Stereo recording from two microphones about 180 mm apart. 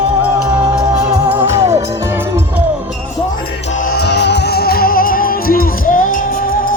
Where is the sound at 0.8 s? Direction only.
20° right (ahead or behind).